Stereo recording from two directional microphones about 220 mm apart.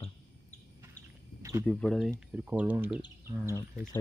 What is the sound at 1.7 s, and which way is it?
Speech, 5° left (ahead or behind).